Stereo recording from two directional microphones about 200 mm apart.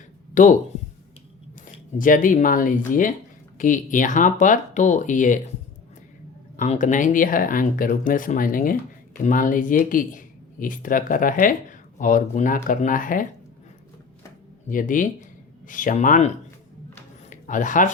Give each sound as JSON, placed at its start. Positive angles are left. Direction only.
{"t": 0.4, "sound": "speech", "side_deg": 40}
{"t": 1.6, "sound": "speech", "side_deg": 40}
{"t": 6.6, "sound": "speech", "side_deg": 40}
{"t": 14.7, "sound": "speech", "side_deg": 40}
{"t": 17.2, "sound": "a sound", "side_deg": 40}